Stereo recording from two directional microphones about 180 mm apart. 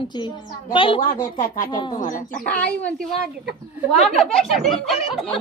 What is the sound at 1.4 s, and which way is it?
Speech, 50° left (ahead or behind).